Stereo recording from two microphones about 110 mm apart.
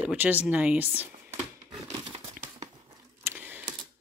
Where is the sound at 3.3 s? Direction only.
25° right (ahead or behind).